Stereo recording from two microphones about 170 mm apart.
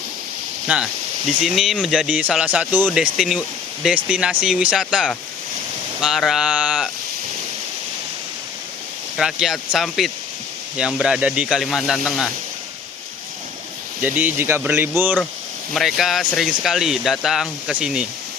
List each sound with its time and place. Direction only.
1.4 s speech: centre (ahead or behind)
6.0 s a sound: centre (ahead or behind)
9.1 s speech: 5° right (ahead or behind)
14.0 s speech: 10° right (ahead or behind)
15.7 s speech: centre (ahead or behind)